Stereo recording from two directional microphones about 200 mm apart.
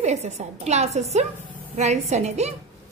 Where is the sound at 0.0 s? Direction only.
35° right (ahead or behind).